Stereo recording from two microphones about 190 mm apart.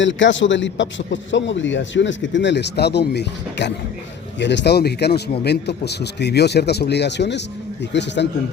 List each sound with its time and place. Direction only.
0.0 s a man's voice: 75° left (ahead or behind)